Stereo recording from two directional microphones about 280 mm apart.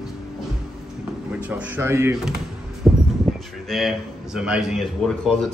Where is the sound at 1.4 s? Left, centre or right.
Centre.